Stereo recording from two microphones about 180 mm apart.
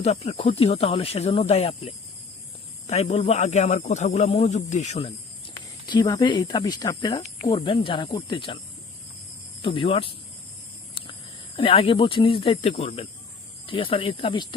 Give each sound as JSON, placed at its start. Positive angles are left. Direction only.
{"t": 0.0, "sound": "speech", "side_deg": 35}
{"t": 9.6, "sound": "speech", "side_deg": 30}
{"t": 11.0, "sound": "a sound", "side_deg": 30}
{"t": 11.5, "sound": "speech", "side_deg": 30}